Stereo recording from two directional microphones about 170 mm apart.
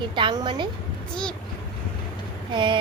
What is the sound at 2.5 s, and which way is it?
Speech, 30° right (ahead or behind).